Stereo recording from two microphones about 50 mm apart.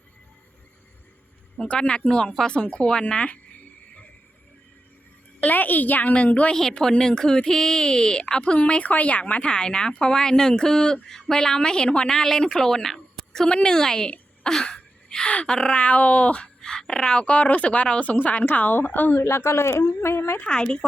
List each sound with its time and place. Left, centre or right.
1.6 s speech: left
5.4 s a woman's voice: left
6.5 s speech: centre
14.1 s a sound: centre
15.3 s speech: left
16.6 s a sound: centre
17.1 s speech: left
19.1 s speech: left
20.4 s speech: centre